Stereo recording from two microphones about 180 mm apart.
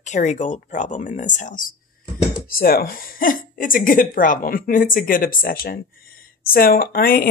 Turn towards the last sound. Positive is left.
turn(degrees=55)  # may be behind; listen again after turning